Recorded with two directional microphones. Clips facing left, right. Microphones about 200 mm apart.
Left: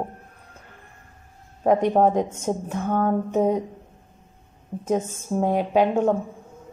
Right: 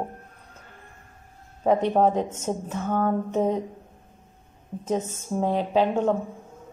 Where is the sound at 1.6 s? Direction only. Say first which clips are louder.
Left 2 dB; 10° left (ahead or behind).